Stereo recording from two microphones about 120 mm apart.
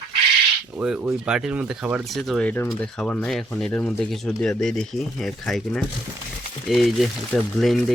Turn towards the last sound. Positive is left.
turn(degrees=0)  # may be behind; listen again after turning